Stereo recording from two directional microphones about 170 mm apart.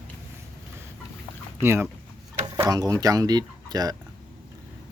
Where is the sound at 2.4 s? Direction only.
25° right (ahead or behind).